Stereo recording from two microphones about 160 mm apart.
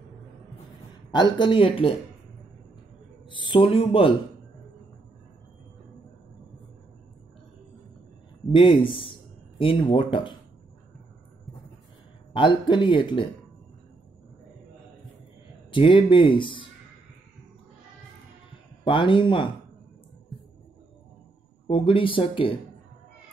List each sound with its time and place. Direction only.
1.1 s speech: 30° left (ahead or behind)
3.3 s speech: 30° left (ahead or behind)
8.5 s speech: 30° left (ahead or behind)
12.4 s speech: 30° left (ahead or behind)
15.7 s speech: 30° left (ahead or behind)
18.9 s speech: 30° left (ahead or behind)
21.6 s speech: 35° left (ahead or behind)